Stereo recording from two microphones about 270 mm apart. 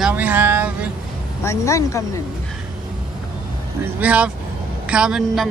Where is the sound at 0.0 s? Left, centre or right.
Centre.